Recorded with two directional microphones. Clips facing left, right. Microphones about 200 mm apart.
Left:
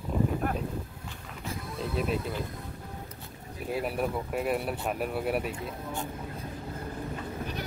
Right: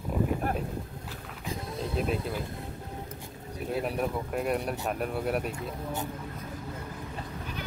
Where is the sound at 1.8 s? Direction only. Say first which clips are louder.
Even; centre (ahead or behind).